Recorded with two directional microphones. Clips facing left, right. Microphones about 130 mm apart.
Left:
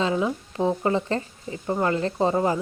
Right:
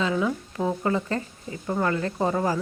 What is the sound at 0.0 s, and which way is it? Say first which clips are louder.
Speech: left 1 dB; 25° left (ahead or behind).